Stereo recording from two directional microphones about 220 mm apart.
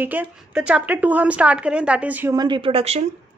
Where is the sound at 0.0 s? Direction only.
10° right (ahead or behind).